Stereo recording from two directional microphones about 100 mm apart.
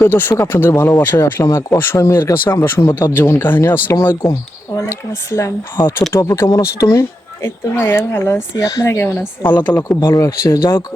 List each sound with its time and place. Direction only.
0.0 s speech: 20° left (ahead or behind)
1.2 s speech: 30° left (ahead or behind)